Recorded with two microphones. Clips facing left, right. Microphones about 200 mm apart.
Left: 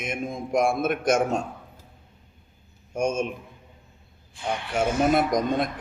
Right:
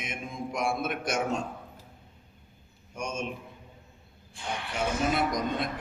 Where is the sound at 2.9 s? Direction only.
45° left (ahead or behind).